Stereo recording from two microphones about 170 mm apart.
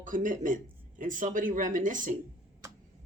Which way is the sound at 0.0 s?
50° right (ahead or behind).